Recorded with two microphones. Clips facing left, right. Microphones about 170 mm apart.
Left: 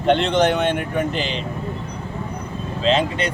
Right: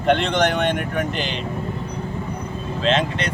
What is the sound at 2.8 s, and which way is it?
Speech, centre (ahead or behind).